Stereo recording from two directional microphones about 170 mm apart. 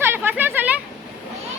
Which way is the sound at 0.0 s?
10° right (ahead or behind).